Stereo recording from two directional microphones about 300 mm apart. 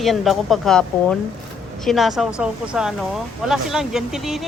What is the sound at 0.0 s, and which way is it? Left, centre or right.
Speech, centre.